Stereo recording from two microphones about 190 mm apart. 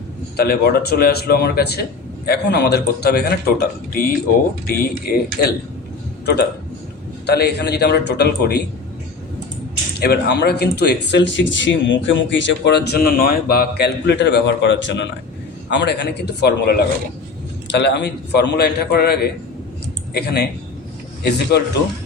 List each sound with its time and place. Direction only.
0.3 s speech: 55° left (ahead or behind)
7.3 s speech: 60° left (ahead or behind)
10.0 s speech: 60° left (ahead or behind)